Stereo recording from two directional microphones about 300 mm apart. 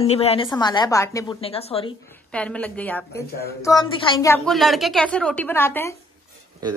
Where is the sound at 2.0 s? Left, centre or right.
Centre.